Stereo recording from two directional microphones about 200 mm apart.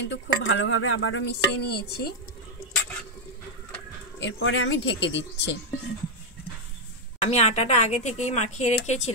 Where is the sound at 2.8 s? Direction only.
5° left (ahead or behind).